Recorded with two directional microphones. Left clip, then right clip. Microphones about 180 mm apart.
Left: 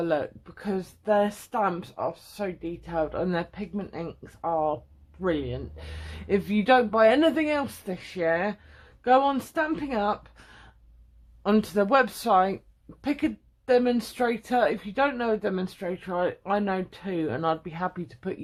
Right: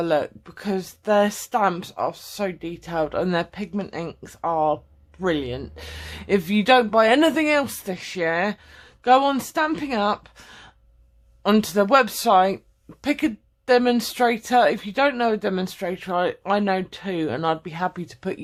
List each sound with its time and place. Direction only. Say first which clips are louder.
0.0 s speech: right 5 dB; 35° right (ahead or behind)